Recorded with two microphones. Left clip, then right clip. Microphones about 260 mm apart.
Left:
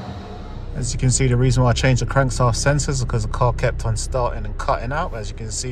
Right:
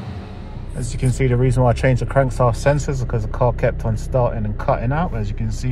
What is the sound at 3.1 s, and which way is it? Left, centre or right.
Speech, right.